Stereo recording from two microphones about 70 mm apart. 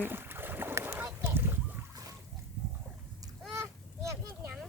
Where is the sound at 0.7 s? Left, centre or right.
Right.